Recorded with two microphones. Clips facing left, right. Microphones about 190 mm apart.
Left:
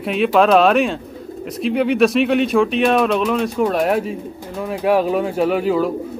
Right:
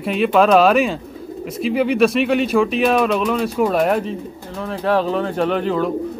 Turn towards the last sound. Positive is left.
turn(degrees=5)  # may be behind; listen again after turning